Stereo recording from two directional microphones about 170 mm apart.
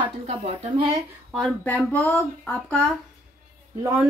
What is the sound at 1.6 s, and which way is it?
Speech, 10° left (ahead or behind).